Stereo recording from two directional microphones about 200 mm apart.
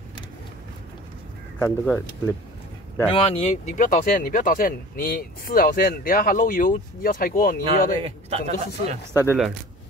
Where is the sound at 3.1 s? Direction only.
30° left (ahead or behind); by 7.6 s 45° left (ahead or behind).